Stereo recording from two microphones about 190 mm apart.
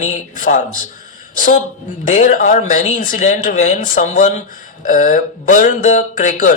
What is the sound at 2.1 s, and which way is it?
Speech, 40° left (ahead or behind).